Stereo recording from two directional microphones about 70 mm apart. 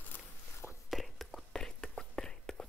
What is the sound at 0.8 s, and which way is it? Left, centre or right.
Whispering, centre.